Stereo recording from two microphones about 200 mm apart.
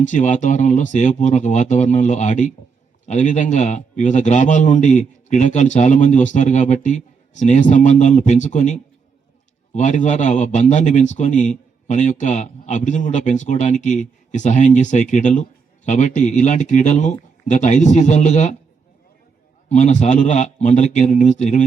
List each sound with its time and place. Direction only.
0.0 s speech: 40° left (ahead or behind)
19.6 s speech: 35° left (ahead or behind)